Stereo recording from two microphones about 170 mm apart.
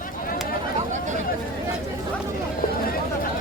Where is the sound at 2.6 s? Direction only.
55° left (ahead or behind).